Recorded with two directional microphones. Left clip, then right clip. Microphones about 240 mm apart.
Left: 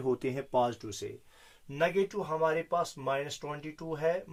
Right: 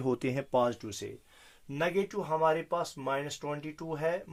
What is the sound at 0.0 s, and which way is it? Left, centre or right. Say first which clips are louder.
Speech: even; right.